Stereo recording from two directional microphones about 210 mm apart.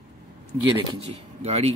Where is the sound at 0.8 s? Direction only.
30° right (ahead or behind).